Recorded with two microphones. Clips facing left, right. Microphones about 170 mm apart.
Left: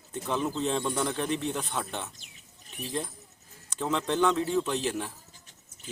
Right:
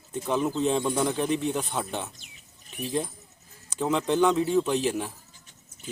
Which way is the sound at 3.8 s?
10° right (ahead or behind).